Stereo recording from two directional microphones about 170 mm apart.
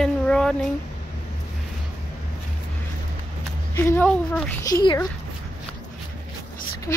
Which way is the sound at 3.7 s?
15° left (ahead or behind).